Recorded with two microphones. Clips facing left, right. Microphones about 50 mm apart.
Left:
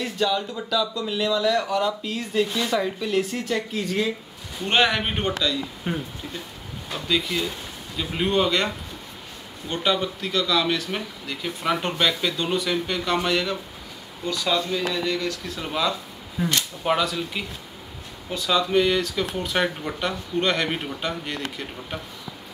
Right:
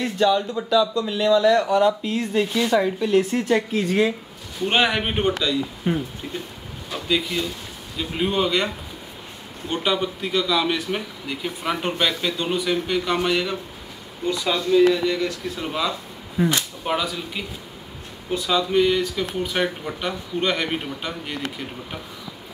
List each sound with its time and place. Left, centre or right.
0.0 s speech: centre
1.9 s speech: centre
5.9 s speech: centre
7.1 s speech: centre
9.7 s speech: centre
18.5 s speech: centre